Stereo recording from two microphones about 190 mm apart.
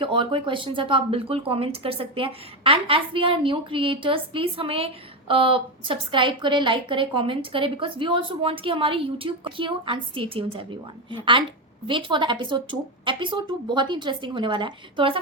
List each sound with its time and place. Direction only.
0.0 s a woman's voice: 25° right (ahead or behind)